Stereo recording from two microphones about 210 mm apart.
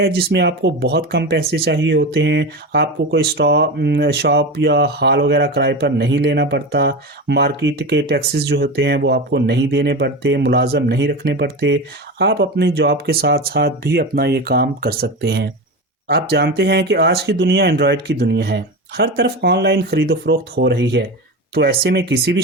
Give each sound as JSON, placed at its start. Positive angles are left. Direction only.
{"t": 0.0, "sound": "speech", "side_deg": -50}